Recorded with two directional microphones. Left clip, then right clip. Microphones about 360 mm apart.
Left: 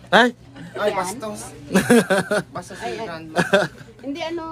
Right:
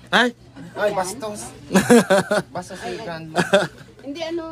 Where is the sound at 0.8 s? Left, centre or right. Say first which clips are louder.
Right 1 dB; right.